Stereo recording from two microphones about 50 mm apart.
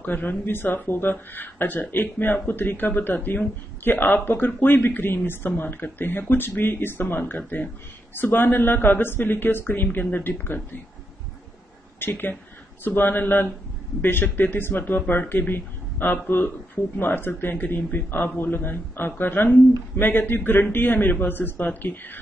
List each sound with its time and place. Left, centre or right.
0.0 s a man's voice: left
7.2 s a man's voice: left
12.0 s a man's voice: left